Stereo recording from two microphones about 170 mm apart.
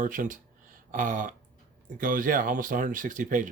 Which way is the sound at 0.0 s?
50° right (ahead or behind).